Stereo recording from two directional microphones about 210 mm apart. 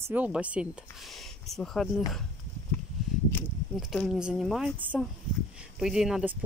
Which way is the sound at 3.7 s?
Centre (ahead or behind).